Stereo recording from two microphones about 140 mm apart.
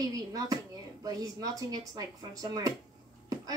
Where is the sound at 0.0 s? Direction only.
25° right (ahead or behind).